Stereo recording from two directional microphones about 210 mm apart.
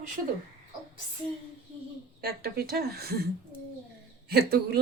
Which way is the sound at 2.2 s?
45° right (ahead or behind).